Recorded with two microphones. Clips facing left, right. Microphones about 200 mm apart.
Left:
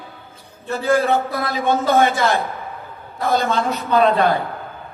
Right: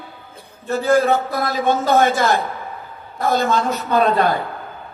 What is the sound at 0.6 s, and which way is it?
A man's voice, 45° right (ahead or behind).